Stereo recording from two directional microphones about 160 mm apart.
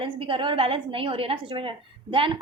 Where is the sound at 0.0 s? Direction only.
30° right (ahead or behind).